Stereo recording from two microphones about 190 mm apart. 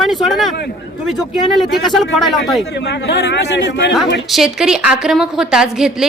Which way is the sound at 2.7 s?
65° left (ahead or behind).